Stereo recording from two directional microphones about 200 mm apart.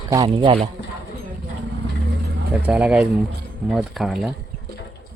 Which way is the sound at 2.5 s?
5° right (ahead or behind).